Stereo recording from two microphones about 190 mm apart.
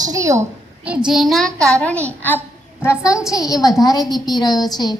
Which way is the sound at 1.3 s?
Centre (ahead or behind).